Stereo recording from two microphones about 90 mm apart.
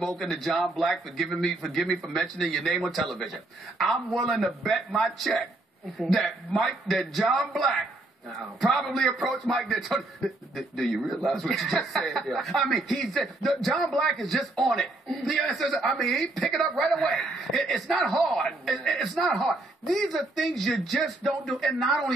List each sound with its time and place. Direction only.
0.0 s a man's voice: 5° left (ahead or behind)